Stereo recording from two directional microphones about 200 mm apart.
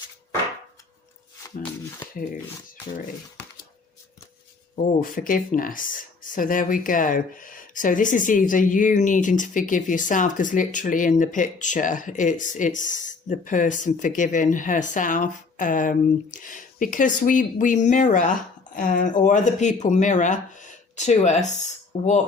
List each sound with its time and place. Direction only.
4.9 s speech: 45° left (ahead or behind)